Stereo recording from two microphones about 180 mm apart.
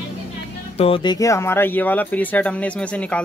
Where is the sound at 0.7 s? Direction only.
30° left (ahead or behind); by 3.2 s 5° left (ahead or behind).